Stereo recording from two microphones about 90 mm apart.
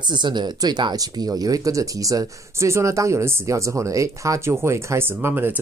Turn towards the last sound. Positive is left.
turn(degrees=-25)  # may be behind; listen again after turning